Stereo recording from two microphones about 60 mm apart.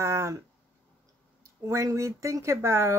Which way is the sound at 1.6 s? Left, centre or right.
Right.